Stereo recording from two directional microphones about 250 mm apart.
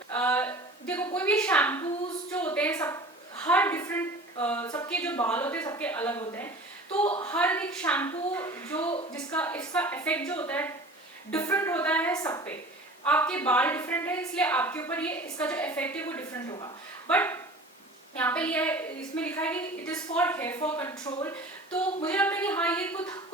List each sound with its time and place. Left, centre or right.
0.1 s a sound: centre
3.4 s a woman's voice: centre
7.0 s a woman's voice: left
7.3 s a woman's voice: centre